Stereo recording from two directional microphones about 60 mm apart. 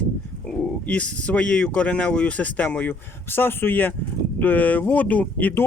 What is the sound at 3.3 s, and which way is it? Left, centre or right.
Speech, left.